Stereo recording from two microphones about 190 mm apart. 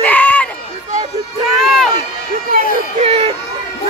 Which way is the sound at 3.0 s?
30° right (ahead or behind).